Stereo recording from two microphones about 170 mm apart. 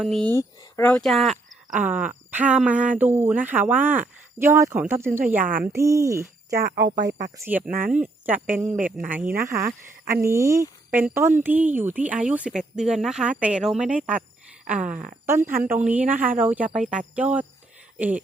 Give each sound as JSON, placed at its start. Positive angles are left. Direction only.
{"t": 0.0, "sound": "speech", "side_deg": 0}
{"t": 5.4, "sound": "speech", "side_deg": -55}
{"t": 5.6, "sound": "speech", "side_deg": -15}
{"t": 6.9, "sound": "speech", "side_deg": -80}
{"t": 7.3, "sound": "speech", "side_deg": -10}
{"t": 7.7, "sound": "speech", "side_deg": -55}
{"t": 7.9, "sound": "speech", "side_deg": -10}
{"t": 14.8, "sound": "speech", "side_deg": -50}
{"t": 15.3, "sound": "speech", "side_deg": -15}
{"t": 16.2, "sound": "speech", "side_deg": -50}
{"t": 16.5, "sound": "speech", "side_deg": -10}